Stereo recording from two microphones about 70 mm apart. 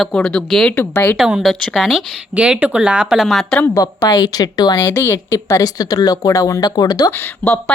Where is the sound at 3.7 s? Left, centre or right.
Left.